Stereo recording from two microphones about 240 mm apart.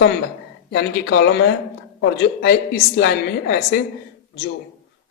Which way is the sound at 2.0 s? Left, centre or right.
Left.